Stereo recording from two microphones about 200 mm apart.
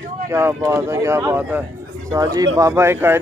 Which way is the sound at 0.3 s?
10° right (ahead or behind).